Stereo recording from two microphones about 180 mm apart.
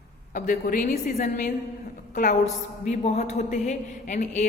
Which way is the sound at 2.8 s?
40° left (ahead or behind).